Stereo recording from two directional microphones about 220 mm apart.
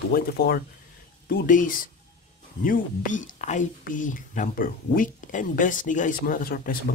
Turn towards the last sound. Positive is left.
turn(degrees=40)  # may be behind; listen again after turning